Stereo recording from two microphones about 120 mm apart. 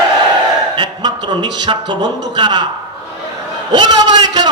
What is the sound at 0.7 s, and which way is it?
A man's voice, 40° right (ahead or behind).